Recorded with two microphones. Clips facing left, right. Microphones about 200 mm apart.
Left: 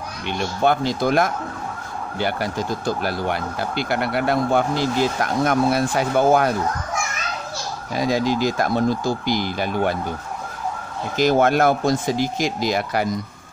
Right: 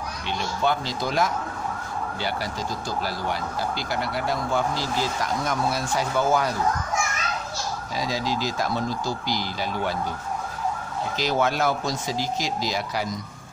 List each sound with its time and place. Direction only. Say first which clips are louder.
0.3 s speech: left 5 dB; 55° left (ahead or behind)
7.9 s speech: left 8 dB; 55° left (ahead or behind)
11.1 s speech: left 8 dB; 50° left (ahead or behind)